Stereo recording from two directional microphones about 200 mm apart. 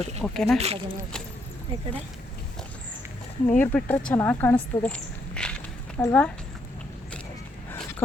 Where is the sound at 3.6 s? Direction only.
10° left (ahead or behind).